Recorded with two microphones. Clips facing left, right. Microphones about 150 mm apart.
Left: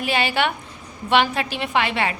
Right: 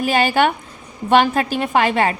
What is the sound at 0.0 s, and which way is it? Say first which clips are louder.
A woman's voice: right 5 dB; 45° right (ahead or behind).